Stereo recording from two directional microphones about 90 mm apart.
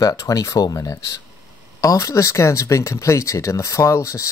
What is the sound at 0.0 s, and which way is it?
Speech, 40° left (ahead or behind).